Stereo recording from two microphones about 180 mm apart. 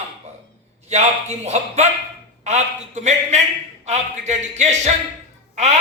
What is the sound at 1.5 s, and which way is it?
Speech, 40° right (ahead or behind).